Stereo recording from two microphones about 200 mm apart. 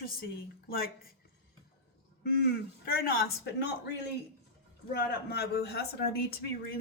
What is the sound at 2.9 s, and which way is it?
Speech, 50° left (ahead or behind).